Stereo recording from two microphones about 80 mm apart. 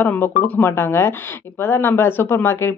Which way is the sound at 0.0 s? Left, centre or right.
Left.